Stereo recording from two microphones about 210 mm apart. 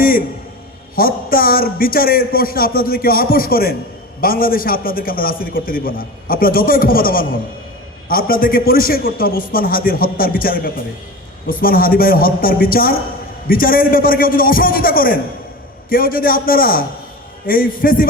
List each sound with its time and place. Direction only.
0.9 s a man's voice: 45° left (ahead or behind)